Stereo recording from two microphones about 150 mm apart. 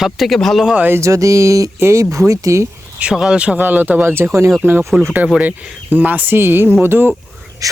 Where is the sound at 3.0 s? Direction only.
5° right (ahead or behind).